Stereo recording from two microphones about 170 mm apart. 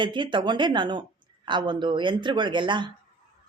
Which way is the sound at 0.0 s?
30° right (ahead or behind).